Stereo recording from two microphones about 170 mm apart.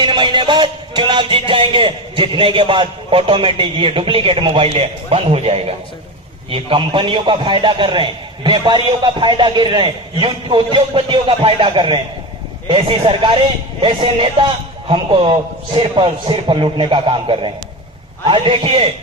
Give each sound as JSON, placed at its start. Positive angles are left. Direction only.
{"t": 0.0, "sound": "music", "side_deg": -30}
{"t": 6.5, "sound": "a man's voice", "side_deg": -30}
{"t": 13.8, "sound": "music", "side_deg": -30}
{"t": 15.8, "sound": "a man's voice", "side_deg": -30}
{"t": 18.3, "sound": "music", "side_deg": -30}